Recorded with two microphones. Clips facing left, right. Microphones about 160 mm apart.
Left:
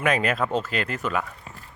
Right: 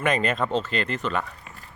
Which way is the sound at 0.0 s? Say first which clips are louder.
Left 1 dB; 5° left (ahead or behind).